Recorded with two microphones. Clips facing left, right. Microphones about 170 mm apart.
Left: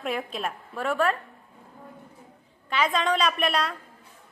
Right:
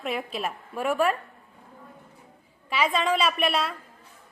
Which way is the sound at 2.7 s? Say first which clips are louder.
Even; 5° right (ahead or behind).